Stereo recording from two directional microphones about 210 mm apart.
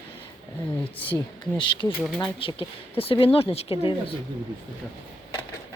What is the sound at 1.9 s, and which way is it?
Speech, 5° right (ahead or behind).